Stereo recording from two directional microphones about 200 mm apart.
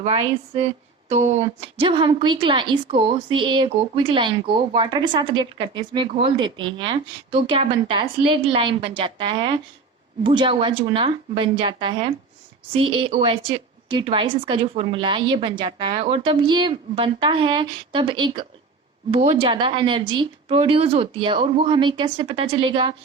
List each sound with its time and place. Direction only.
0.0 s a woman's voice: 30° right (ahead or behind)